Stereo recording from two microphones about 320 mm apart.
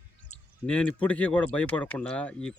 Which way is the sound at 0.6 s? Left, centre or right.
Centre.